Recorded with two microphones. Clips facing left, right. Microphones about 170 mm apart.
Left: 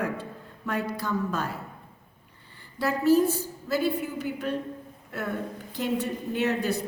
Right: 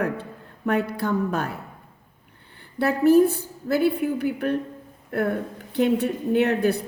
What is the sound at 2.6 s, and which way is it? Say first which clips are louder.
A woman's voice: right 6 dB; 60° right (ahead or behind).